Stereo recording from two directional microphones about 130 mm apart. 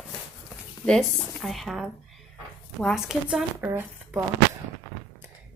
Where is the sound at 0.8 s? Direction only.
5° left (ahead or behind).